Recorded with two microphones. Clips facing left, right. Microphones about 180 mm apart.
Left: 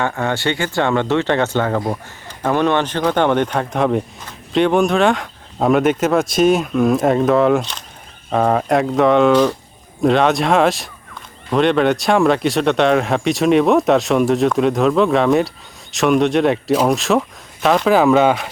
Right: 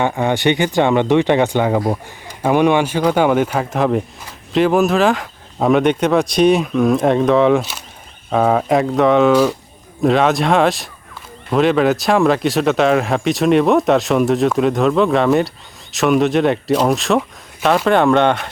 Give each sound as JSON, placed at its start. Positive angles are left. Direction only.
{"t": 0.0, "sound": "speech", "side_deg": -15}